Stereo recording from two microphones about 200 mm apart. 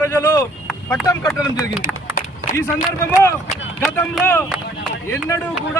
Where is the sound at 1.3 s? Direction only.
Centre (ahead or behind).